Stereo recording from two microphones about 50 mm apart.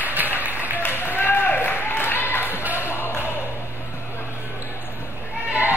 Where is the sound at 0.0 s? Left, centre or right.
Right.